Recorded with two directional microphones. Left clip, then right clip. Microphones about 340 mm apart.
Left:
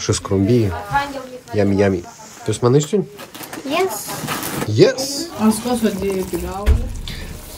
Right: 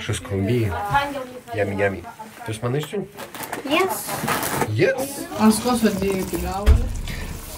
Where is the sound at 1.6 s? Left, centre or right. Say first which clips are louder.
Left 5 dB; left.